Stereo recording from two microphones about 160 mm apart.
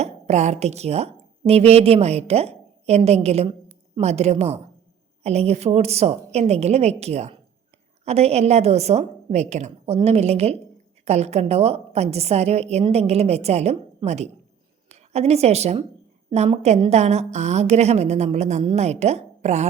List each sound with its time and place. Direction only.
0.0 s a woman's voice: 45° right (ahead or behind)